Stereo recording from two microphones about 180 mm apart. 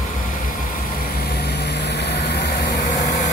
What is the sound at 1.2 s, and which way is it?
Vehicle, 65° left (ahead or behind).